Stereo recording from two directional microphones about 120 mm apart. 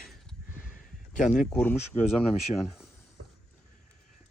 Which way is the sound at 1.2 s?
90° left.